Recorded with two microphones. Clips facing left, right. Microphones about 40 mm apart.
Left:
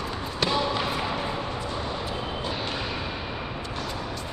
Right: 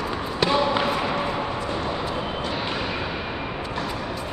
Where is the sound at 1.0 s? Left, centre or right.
Right.